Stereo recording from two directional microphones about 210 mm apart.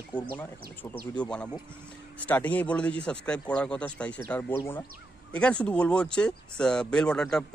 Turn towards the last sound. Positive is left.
turn(degrees=5)  # may be behind; listen again after turning